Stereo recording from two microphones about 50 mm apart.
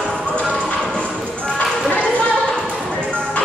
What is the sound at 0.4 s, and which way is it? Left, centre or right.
Music, left.